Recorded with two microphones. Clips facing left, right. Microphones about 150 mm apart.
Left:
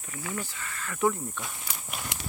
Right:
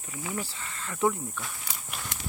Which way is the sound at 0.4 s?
25° right (ahead or behind).